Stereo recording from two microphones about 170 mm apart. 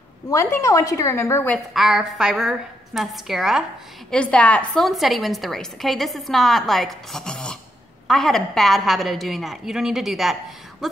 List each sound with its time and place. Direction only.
0.3 s a woman's voice: 20° left (ahead or behind)
1.7 s a woman's voice: centre (ahead or behind)